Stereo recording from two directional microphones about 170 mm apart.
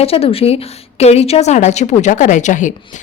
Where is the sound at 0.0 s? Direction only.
35° left (ahead or behind).